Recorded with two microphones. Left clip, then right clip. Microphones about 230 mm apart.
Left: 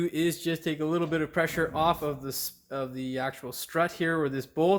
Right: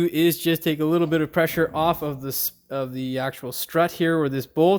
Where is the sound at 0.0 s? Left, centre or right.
Right.